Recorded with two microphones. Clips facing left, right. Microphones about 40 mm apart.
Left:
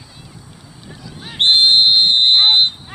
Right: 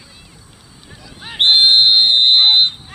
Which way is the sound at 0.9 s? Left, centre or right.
Centre.